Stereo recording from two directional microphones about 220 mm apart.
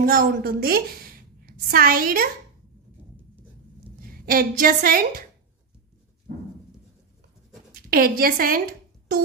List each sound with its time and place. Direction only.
0.0 s a woman's voice: 40° right (ahead or behind)
4.0 s a woman's voice: 40° right (ahead or behind)
7.7 s a woman's voice: 40° right (ahead or behind)